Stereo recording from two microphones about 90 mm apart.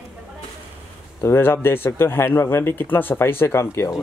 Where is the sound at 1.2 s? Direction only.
25° left (ahead or behind).